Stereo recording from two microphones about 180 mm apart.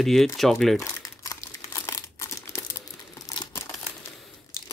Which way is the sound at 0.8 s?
20° left (ahead or behind).